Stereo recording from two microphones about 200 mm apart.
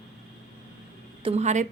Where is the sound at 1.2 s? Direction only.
35° right (ahead or behind).